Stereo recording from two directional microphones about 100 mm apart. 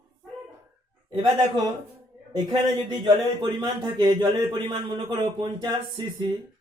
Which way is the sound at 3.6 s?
45° right (ahead or behind).